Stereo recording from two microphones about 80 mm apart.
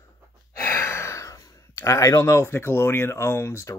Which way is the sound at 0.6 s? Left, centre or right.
Left.